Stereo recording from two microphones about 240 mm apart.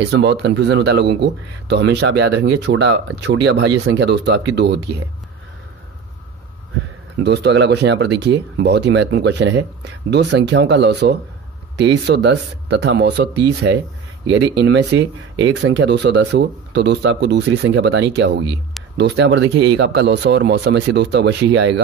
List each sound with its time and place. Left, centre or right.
0.0 s speech: right
7.2 s speech: right